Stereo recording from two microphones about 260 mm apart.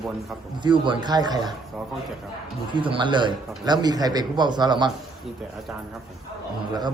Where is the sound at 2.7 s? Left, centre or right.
Centre.